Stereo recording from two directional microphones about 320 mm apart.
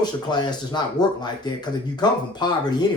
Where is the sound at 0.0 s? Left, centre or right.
Centre.